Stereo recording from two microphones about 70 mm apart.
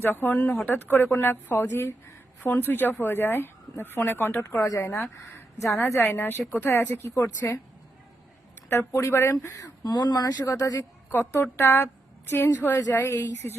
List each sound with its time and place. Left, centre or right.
0.0 s speech: left
4.4 s speech: left
6.0 s speech: left
8.7 s speech: left
9.8 s speech: left
10.4 s speech: left